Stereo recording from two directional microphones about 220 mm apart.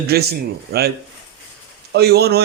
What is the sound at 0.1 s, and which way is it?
Speech, 45° right (ahead or behind).